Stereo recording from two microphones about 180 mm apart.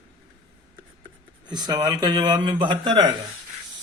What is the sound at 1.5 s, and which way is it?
Speech, 25° right (ahead or behind).